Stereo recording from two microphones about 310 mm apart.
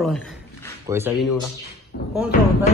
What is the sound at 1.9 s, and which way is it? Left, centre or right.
Speech, left.